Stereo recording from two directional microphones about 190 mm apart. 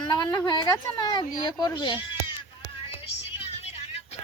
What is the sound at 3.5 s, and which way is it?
Vehicle, 35° left (ahead or behind).